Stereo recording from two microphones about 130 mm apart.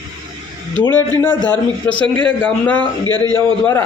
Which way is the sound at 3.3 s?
15° left (ahead or behind).